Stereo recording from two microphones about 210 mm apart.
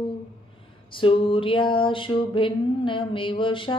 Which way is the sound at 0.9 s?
25° left (ahead or behind).